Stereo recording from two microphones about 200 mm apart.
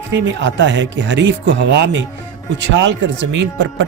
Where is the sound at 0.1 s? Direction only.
65° right (ahead or behind).